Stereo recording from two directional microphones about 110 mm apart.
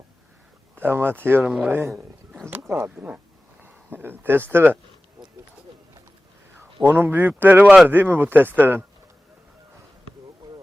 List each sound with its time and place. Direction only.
0.8 s speech: 20° right (ahead or behind)
6.8 s speech: 20° right (ahead or behind)